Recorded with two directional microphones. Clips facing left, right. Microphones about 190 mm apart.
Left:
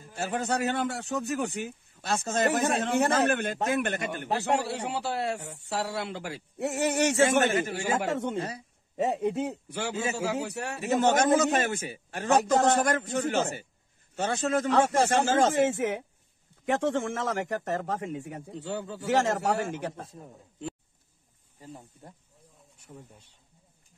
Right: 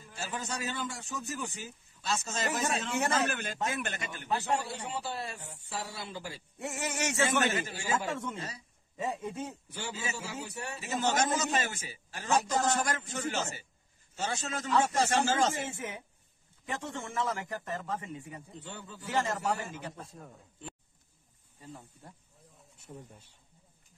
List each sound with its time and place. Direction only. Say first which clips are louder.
0.1 s a man's voice: left 9 dB; 60° left (ahead or behind)
16.6 s a man's voice: left 12 dB; 85° left
17.3 s a man's voice: left 6 dB; 70° left (ahead or behind)
22.8 s speech: even; 10° right (ahead or behind)